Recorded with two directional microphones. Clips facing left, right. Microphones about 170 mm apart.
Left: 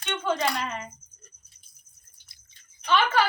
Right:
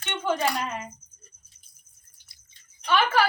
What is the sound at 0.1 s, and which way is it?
Speech, 10° right (ahead or behind).